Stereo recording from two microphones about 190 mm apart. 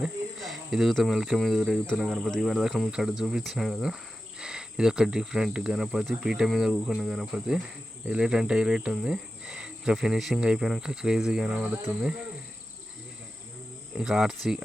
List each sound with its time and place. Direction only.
0.0 s speech: centre (ahead or behind)
14.0 s speech: 5° right (ahead or behind)